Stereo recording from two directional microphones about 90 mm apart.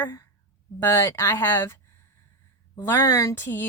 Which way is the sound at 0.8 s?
25° left (ahead or behind).